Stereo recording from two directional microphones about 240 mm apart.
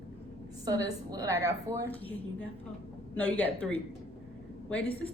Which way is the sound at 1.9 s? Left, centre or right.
Centre.